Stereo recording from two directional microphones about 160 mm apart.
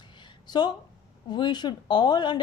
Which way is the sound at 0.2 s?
25° left (ahead or behind).